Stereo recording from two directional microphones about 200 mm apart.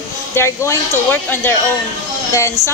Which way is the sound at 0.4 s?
10° left (ahead or behind).